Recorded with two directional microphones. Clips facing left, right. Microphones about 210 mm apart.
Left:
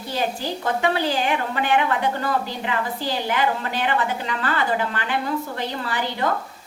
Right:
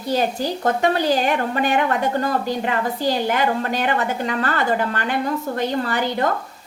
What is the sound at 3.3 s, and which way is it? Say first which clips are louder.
A woman's voice: right 3 dB; 45° right (ahead or behind).